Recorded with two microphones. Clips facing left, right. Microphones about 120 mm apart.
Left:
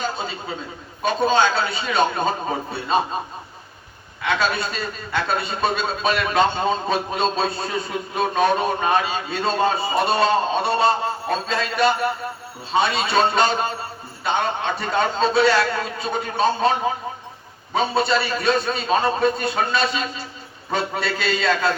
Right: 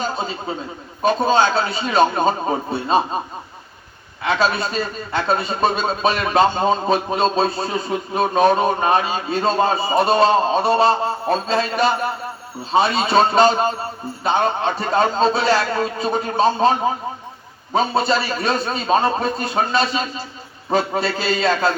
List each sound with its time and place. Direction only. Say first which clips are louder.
1.0 s a man's voice: right 2 dB; 30° right (ahead or behind)
4.2 s a man's voice: right 3 dB; 35° right (ahead or behind)
17.7 s a man's voice: right 2 dB; 30° right (ahead or behind)